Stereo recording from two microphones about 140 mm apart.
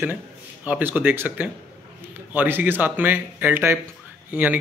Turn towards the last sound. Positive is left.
turn(degrees=-10)  # may be behind; listen again after turning